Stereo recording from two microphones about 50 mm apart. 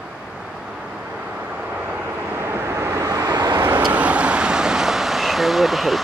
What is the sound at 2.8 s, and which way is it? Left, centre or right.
Vehicle, right.